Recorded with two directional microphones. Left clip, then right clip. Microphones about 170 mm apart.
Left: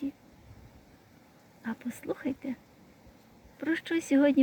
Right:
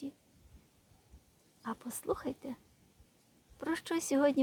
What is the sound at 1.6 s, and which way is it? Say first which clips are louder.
Speech: left 3 dB; 15° right (ahead or behind).